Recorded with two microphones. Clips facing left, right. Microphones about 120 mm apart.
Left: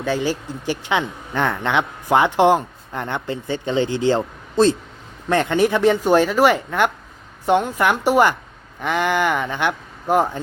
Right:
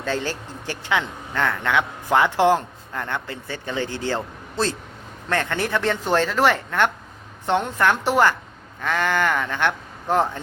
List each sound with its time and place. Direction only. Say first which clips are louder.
0.0 s speech: left 4 dB; 10° left (ahead or behind)